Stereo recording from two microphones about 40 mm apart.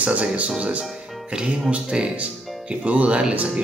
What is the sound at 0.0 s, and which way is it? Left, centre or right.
Speech, right.